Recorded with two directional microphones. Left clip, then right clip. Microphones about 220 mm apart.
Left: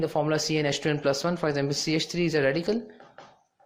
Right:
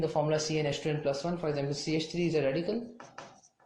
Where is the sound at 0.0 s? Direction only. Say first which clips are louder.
Left 3 dB; 40° left (ahead or behind).